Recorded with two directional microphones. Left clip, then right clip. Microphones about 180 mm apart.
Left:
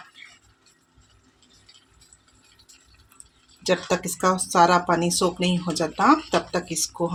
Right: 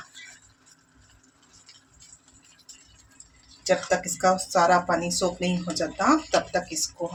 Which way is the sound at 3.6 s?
55° left (ahead or behind).